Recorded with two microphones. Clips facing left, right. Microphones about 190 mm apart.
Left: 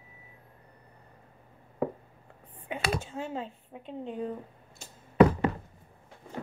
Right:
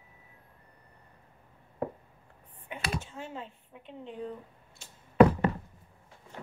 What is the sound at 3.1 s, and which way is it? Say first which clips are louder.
Speech: left 6 dB; 35° left (ahead or behind).